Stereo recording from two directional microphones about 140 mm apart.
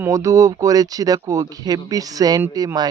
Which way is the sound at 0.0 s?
20° right (ahead or behind).